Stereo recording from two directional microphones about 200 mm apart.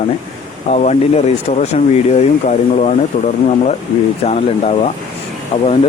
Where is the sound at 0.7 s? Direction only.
35° left (ahead or behind).